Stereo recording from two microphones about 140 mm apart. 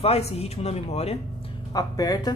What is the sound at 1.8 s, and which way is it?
Speech, 25° left (ahead or behind).